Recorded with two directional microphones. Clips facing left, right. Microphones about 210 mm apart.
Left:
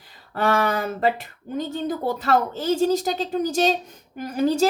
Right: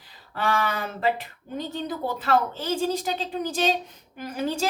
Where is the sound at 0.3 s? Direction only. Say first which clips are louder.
Left 5 dB; 45° left (ahead or behind).